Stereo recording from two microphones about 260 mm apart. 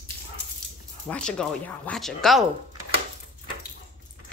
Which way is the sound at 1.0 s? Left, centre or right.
Centre.